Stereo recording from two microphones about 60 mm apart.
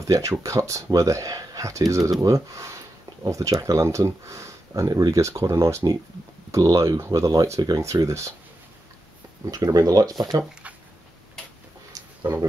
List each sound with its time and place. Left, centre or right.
0.0 s speech: right
6.5 s speech: right
7.0 s speech: right
9.5 s speech: right
11.9 s a sound: right